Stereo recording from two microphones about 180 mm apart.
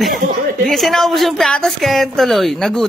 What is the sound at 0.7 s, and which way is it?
A woman's voice, centre (ahead or behind).